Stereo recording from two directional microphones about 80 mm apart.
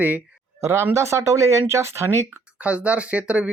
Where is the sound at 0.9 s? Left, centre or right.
Right.